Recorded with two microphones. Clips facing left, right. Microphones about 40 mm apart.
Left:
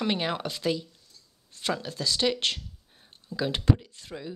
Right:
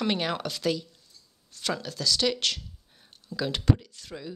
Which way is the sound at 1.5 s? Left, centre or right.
Left.